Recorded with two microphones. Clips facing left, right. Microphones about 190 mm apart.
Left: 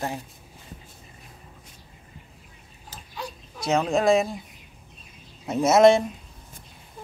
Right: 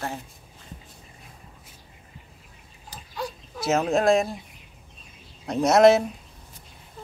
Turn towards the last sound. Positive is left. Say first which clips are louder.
# even
turn(degrees=0)  # may be behind; listen again after turning